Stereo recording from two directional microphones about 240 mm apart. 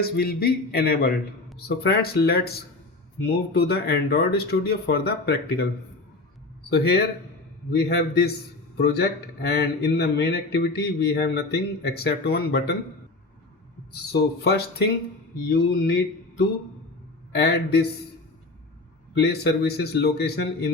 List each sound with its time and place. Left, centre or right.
0.0 s speech: left
6.7 s a man's voice: left
14.1 s speech: left
17.3 s speech: left
19.1 s a man's voice: left